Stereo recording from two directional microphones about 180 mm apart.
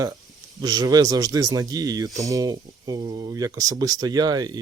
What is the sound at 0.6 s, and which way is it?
Speech, 20° right (ahead or behind).